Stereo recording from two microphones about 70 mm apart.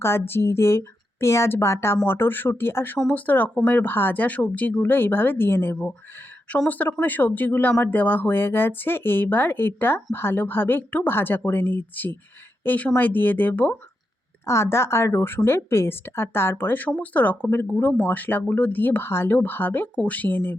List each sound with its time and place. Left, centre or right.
0.0 s speech: left; by 3.8 s centre
3.8 s speech: left
14.4 s speech: left